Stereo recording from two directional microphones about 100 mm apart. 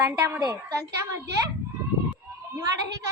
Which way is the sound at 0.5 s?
30° right (ahead or behind).